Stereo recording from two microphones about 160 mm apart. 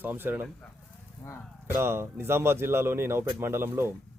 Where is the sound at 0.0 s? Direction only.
10° right (ahead or behind).